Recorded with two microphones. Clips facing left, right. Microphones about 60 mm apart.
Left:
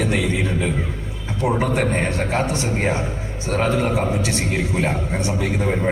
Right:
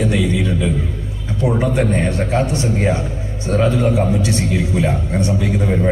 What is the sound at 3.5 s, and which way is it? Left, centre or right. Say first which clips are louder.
Speech: right 4 dB; left.